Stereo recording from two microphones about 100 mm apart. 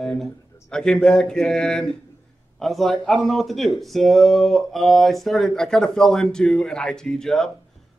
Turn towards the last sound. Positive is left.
turn(degrees=5)  # may be behind; listen again after turning